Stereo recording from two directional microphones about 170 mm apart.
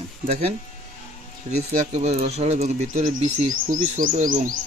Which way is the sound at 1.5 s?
40° right (ahead or behind).